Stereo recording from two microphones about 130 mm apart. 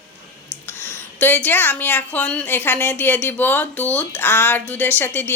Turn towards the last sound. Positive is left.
turn(degrees=15)  # may be behind; listen again after turning